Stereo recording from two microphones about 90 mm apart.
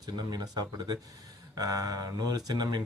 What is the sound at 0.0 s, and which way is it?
Speech, 45° right (ahead or behind).